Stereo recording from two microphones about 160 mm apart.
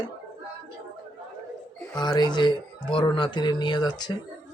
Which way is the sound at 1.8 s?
25° left (ahead or behind).